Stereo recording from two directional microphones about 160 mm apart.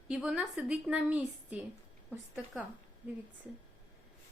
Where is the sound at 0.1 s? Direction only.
5° right (ahead or behind).